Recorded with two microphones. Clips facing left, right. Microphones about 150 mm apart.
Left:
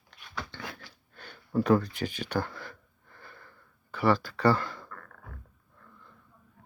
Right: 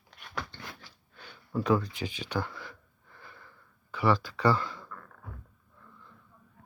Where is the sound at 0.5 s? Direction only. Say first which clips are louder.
Left 4 dB; 90° left.